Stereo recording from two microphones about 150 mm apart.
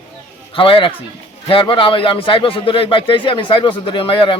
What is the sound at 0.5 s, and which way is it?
Speech, 35° left (ahead or behind).